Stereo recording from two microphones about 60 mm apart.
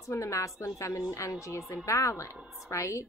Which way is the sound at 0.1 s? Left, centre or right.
Left.